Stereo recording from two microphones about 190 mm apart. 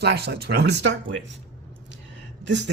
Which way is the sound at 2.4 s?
70° right (ahead or behind).